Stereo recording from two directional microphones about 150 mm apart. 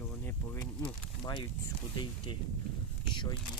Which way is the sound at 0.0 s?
10° left (ahead or behind).